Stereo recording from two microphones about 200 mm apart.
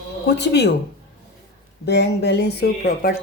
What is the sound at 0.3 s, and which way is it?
Speech, 55° left (ahead or behind).